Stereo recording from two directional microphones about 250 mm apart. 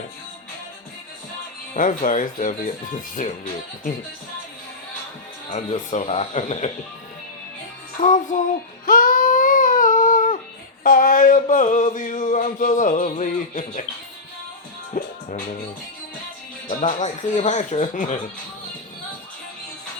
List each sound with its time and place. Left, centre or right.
1.7 s a sound: left
3.2 s speech: left
5.5 s speech: left
8.0 s speech: left
8.9 s baby cry: left
10.8 s a sound: left
15.0 s music: left
16.6 s speech: left